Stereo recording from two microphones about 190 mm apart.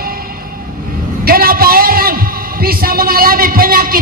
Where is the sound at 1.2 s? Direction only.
50° right (ahead or behind).